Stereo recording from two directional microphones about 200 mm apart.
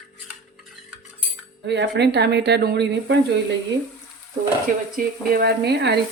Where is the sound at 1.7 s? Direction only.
55° right (ahead or behind).